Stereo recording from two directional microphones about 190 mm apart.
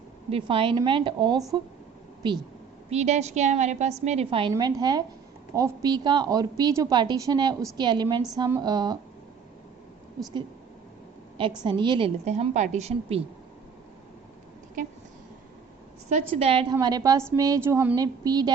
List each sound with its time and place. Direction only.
0.3 s a woman's voice: 30° right (ahead or behind)
2.9 s a woman's voice: 35° right (ahead or behind)
11.3 s a woman's voice: 25° right (ahead or behind)
16.4 s a woman's voice: 30° right (ahead or behind)
16.7 s a woman's voice: 20° right (ahead or behind)